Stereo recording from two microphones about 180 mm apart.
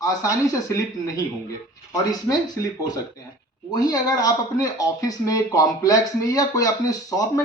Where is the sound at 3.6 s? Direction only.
20° left (ahead or behind).